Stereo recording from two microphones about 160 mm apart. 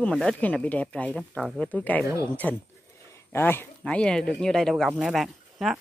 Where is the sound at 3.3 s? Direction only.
15° left (ahead or behind).